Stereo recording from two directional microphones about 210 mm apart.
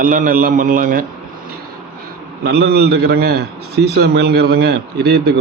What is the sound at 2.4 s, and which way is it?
A man's voice, 50° right (ahead or behind).